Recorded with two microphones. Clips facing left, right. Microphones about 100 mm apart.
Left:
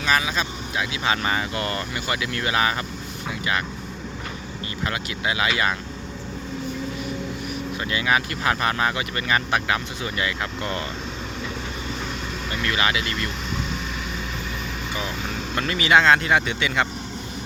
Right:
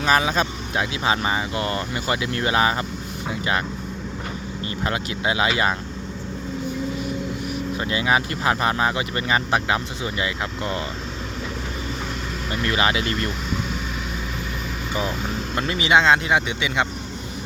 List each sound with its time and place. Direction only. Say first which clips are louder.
0.0 s speech: right 4 dB; 40° right (ahead or behind)
1.0 s speech: even; 25° right (ahead or behind)
4.9 s speech: right 3 dB; 30° right (ahead or behind)
7.8 s speech: right 1 dB; 25° right (ahead or behind)
12.6 s speech: right 3 dB; 30° right (ahead or behind)
15.5 s speech: even; 20° right (ahead or behind)